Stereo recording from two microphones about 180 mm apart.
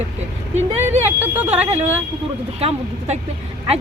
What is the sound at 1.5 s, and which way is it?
Speech, 35° right (ahead or behind).